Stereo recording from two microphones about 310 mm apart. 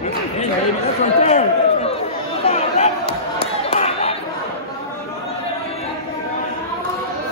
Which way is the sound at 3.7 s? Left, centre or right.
Left.